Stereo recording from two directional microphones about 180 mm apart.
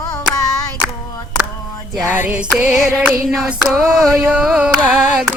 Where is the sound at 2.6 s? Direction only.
5° right (ahead or behind).